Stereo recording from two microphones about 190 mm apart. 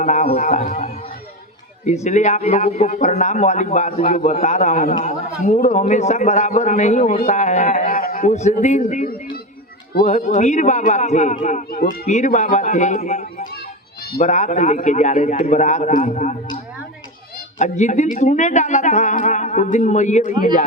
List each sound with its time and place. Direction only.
0.0 s a man's voice: 35° left (ahead or behind)
2.0 s a man's voice: 40° left (ahead or behind)
17.6 s a man's voice: 40° left (ahead or behind)